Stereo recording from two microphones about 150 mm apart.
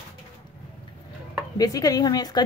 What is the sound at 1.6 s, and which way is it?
Speech, 25° left (ahead or behind).